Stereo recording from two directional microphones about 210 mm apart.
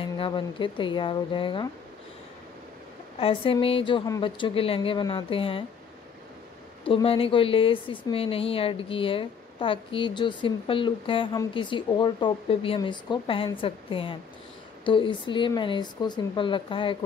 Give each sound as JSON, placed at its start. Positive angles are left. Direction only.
{"t": 0.0, "sound": "a woman's voice", "side_deg": 25}
{"t": 3.2, "sound": "a woman's voice", "side_deg": 25}
{"t": 6.8, "sound": "a woman's voice", "side_deg": 25}